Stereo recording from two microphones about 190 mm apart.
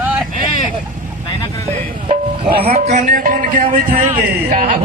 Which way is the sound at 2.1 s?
30° right (ahead or behind).